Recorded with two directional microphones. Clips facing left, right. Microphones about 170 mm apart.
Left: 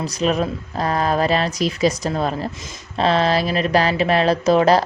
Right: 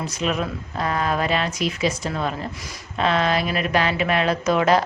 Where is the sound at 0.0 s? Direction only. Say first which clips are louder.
Left 4 dB; 35° left (ahead or behind).